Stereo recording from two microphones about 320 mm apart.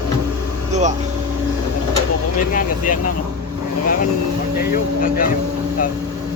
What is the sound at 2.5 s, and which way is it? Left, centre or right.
Speech, left.